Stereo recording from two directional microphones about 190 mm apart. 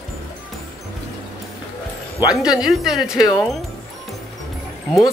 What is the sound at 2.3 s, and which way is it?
Speech, 5° right (ahead or behind).